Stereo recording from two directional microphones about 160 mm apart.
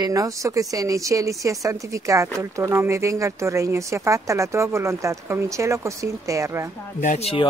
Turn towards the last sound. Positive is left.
turn(degrees=50)  # may be behind; listen again after turning